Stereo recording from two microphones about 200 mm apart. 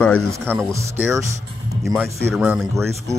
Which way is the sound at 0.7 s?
15° right (ahead or behind).